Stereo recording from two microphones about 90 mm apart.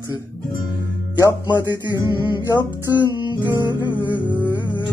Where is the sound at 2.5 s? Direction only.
50° left (ahead or behind).